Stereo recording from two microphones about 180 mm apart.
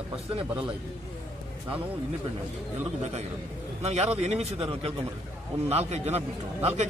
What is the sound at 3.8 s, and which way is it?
A man's voice, 35° right (ahead or behind).